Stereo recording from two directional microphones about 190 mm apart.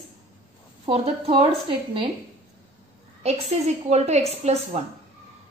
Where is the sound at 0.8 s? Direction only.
30° right (ahead or behind).